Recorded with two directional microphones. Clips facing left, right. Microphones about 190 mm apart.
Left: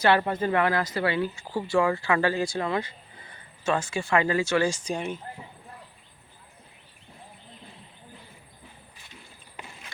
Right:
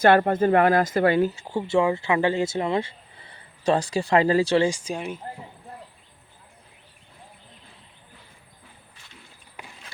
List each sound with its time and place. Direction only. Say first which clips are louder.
0.0 s speech: right 5 dB; 50° right (ahead or behind)
1.5 s speech: right 2 dB; 25° right (ahead or behind)
4.7 s speech: even; 10° right (ahead or behind)